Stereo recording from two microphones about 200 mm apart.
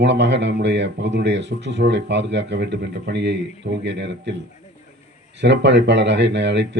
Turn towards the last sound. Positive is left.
turn(degrees=-60)  # may be behind; listen again after turning